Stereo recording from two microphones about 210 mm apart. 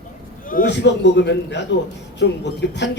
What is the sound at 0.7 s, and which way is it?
A man's voice, 55° left (ahead or behind).